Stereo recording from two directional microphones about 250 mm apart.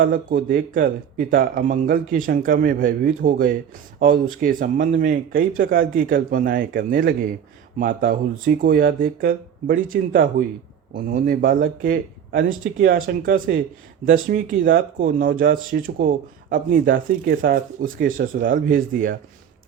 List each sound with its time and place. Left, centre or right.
0.0 s speech: right